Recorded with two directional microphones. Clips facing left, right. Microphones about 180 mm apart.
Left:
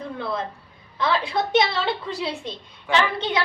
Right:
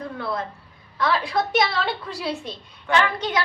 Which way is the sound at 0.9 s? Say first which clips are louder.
Even; 25° left (ahead or behind).